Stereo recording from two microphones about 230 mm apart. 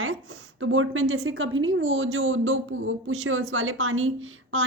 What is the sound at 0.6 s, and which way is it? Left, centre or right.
A woman's voice, right.